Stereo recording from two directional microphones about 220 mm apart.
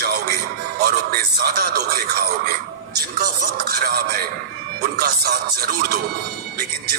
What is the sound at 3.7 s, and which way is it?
Speech, 45° right (ahead or behind).